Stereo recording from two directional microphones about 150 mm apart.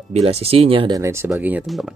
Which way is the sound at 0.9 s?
20° right (ahead or behind).